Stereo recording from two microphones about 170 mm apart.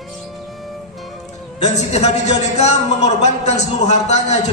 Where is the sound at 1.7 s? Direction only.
40° left (ahead or behind).